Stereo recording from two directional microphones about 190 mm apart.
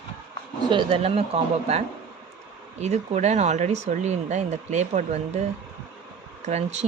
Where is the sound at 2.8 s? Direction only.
35° right (ahead or behind).